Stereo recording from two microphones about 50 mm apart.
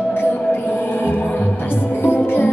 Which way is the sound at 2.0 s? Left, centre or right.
Left.